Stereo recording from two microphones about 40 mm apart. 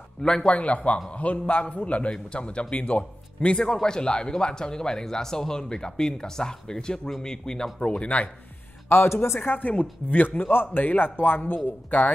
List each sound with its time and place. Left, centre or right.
0.5 s a man's voice: left; by 7.7 s centre
7.8 s a man's voice: left
8.8 s a man's voice: left
9.4 s speech: left